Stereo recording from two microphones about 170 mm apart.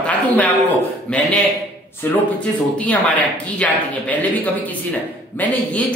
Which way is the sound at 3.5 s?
10° left (ahead or behind).